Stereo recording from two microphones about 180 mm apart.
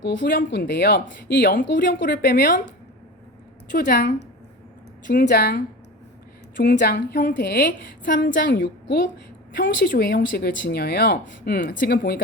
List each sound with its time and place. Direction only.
0.3 s speech: 55° left (ahead or behind); by 1.4 s 75° left (ahead or behind)
1.4 s a woman's voice: 55° left (ahead or behind)
3.7 s speech: 55° left (ahead or behind)
8.4 s a woman's voice: 70° left (ahead or behind); by 12.2 s 55° left (ahead or behind)